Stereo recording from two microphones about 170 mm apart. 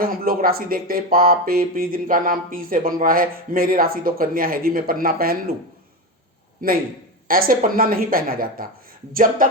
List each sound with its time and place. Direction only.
0.0 s speech: 60° right (ahead or behind)
6.6 s speech: 55° right (ahead or behind)